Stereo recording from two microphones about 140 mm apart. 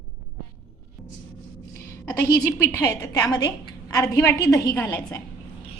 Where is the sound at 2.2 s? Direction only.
15° left (ahead or behind).